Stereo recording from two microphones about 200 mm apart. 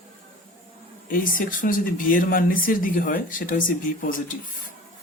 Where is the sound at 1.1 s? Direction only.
45° left (ahead or behind).